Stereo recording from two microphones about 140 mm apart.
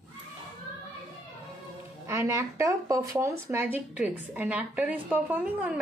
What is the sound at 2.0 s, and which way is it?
Speech, 20° right (ahead or behind).